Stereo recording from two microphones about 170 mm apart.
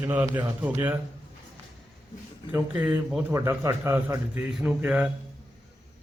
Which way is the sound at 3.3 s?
15° right (ahead or behind).